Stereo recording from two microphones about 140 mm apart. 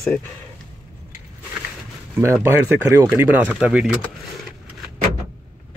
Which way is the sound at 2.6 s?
15° right (ahead or behind).